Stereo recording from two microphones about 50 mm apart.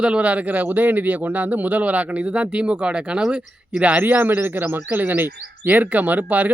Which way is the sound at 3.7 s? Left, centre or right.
Right.